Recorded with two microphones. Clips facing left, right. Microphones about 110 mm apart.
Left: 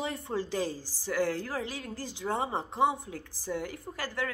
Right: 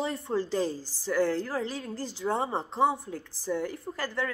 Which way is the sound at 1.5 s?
15° left (ahead or behind).